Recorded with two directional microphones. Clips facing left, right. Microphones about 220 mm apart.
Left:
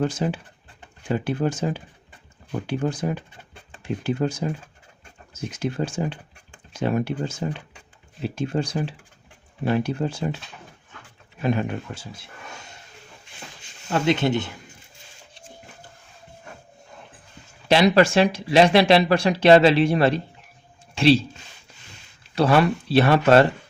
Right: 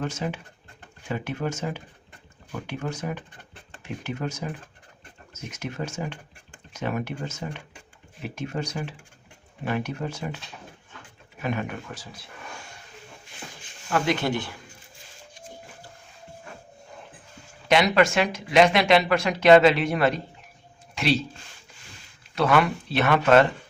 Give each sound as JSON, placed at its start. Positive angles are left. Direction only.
{"t": 0.0, "sound": "speech", "side_deg": 35}
{"t": 11.4, "sound": "speech", "side_deg": 30}
{"t": 13.9, "sound": "speech", "side_deg": 25}
{"t": 17.7, "sound": "speech", "side_deg": 35}
{"t": 22.4, "sound": "speech", "side_deg": 30}